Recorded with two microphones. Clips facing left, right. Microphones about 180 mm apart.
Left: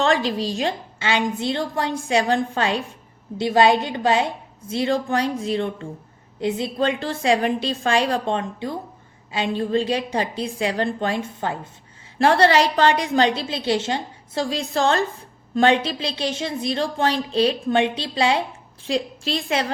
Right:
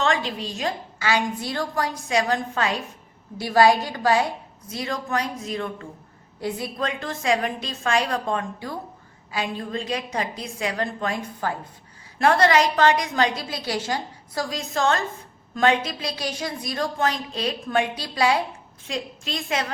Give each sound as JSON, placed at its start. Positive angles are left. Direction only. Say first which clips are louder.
{"t": 0.0, "sound": "a woman's voice", "louder": "left 4 dB", "side_deg": 35}